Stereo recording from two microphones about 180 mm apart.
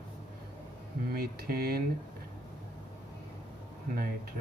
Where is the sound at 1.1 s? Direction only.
55° right (ahead or behind).